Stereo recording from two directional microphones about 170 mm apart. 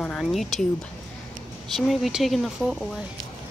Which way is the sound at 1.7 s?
Centre (ahead or behind).